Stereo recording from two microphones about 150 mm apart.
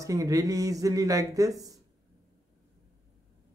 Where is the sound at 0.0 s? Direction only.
20° right (ahead or behind).